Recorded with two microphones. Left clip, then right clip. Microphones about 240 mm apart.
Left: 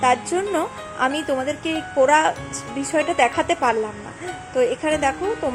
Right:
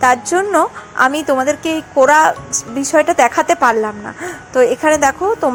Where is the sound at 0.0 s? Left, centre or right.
Centre.